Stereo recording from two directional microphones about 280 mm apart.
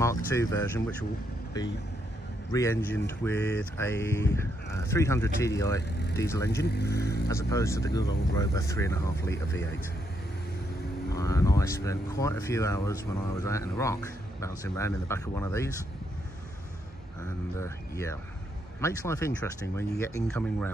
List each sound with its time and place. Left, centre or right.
0.0 s speech: centre
2.5 s speech: centre
6.6 s speech: left
7.2 s speech: centre
11.1 s speech: centre
17.6 s speech: centre